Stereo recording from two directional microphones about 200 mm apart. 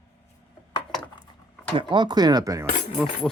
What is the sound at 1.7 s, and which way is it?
Speech, 25° right (ahead or behind).